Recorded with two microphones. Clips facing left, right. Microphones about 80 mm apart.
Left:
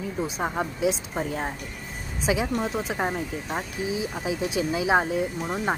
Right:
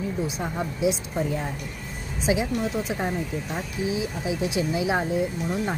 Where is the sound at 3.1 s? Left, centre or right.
Left.